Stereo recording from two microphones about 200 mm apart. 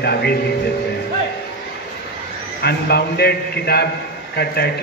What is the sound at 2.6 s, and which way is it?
A man's voice, 55° left (ahead or behind).